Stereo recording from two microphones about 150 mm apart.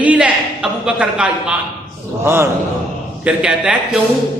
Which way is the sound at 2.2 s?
20° right (ahead or behind).